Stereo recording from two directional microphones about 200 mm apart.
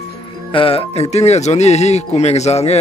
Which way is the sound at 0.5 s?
25° left (ahead or behind).